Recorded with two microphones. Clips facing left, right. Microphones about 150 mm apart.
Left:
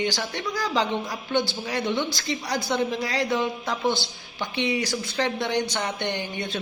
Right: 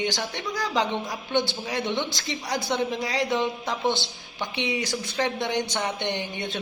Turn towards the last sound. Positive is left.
turn(degrees=-20)  # may be behind; listen again after turning